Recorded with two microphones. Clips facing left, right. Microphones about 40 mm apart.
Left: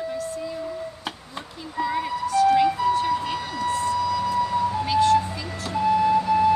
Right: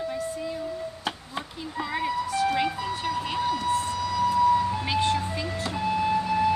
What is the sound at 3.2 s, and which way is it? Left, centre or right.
Siren, centre.